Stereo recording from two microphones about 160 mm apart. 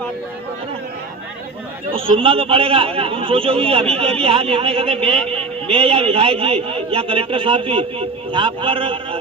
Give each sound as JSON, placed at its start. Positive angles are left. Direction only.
{"t": 1.9, "sound": "a man's voice", "side_deg": -35}